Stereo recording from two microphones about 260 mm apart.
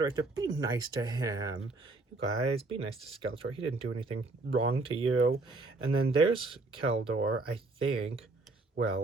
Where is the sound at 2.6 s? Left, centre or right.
Right.